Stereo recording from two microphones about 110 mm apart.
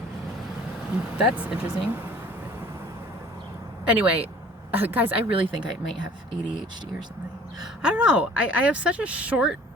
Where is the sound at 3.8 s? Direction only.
15° right (ahead or behind).